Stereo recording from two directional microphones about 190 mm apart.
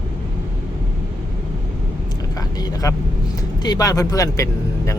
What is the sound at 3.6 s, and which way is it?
Speech, 20° left (ahead or behind).